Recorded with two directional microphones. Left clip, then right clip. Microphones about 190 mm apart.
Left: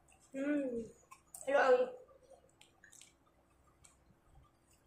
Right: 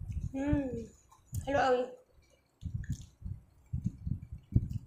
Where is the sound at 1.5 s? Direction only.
20° right (ahead or behind).